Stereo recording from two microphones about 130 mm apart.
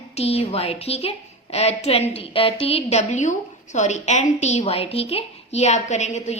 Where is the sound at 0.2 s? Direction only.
50° left (ahead or behind).